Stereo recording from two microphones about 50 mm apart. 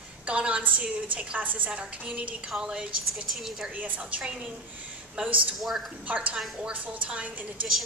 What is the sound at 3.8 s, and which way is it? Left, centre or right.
Speech, right.